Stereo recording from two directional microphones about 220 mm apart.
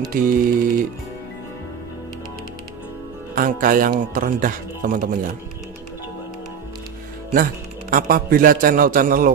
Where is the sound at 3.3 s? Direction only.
40° right (ahead or behind).